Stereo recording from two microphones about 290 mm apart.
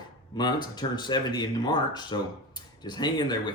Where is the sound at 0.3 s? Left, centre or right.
Centre.